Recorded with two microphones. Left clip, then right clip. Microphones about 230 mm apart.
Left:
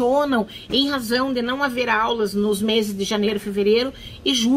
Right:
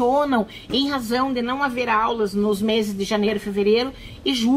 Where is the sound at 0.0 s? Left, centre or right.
Centre.